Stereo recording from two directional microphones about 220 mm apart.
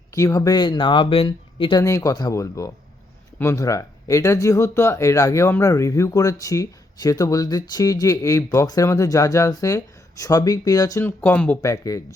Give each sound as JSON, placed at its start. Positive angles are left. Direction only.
{"t": 0.1, "sound": "speech", "side_deg": 15}